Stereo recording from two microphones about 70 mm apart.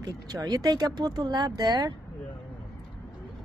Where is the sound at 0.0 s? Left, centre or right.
Right.